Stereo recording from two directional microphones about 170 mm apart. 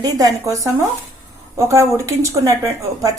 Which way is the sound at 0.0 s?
20° right (ahead or behind).